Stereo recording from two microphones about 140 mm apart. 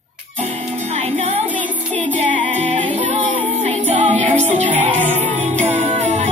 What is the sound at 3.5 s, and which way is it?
Music, 50° right (ahead or behind).